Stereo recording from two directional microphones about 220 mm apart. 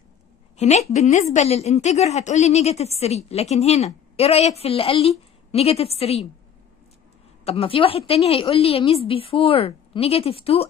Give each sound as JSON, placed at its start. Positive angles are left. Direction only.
{"t": 0.6, "sound": "a woman's voice", "side_deg": 30}
{"t": 7.4, "sound": "a woman's voice", "side_deg": 25}